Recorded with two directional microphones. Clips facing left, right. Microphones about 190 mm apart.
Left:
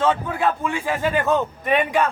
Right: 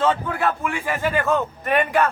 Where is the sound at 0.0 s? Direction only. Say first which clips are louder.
Left 1 dB; 10° left (ahead or behind).